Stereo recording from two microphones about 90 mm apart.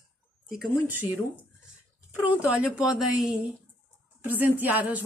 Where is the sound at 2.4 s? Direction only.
10° right (ahead or behind).